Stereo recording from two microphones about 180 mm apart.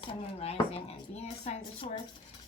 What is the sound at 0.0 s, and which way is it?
Speech, 30° left (ahead or behind).